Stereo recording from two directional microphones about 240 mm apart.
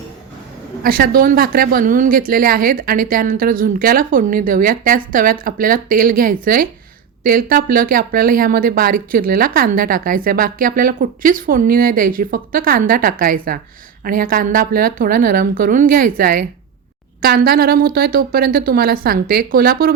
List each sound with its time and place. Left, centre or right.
0.8 s speech: right